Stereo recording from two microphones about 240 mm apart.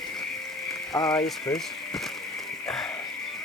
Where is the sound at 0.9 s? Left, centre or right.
Centre.